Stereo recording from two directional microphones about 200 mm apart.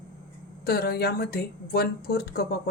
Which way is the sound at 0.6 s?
50° left (ahead or behind).